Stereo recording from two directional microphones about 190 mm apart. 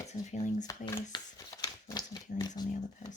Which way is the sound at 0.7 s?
15° left (ahead or behind).